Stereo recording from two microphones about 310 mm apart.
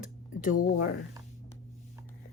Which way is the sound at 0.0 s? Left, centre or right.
Left.